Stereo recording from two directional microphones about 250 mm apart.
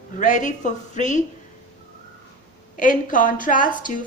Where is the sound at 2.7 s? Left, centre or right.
Left.